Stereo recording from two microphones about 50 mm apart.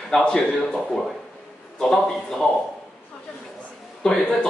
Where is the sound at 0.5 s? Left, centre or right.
Centre.